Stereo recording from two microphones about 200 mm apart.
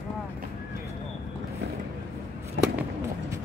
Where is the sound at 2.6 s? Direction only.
65° right (ahead or behind).